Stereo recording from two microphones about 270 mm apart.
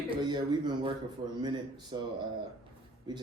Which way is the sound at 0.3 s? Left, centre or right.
Centre.